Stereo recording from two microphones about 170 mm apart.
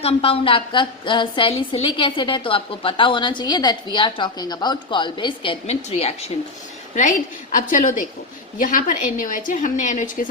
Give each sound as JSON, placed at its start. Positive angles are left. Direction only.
{"t": 0.0, "sound": "a woman's voice", "side_deg": 35}
{"t": 7.7, "sound": "a woman's voice", "side_deg": 50}